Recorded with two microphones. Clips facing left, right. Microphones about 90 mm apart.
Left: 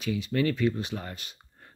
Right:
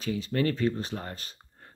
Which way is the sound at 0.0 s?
35° right (ahead or behind).